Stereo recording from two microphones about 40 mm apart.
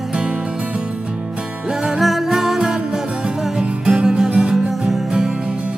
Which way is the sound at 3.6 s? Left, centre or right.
Right.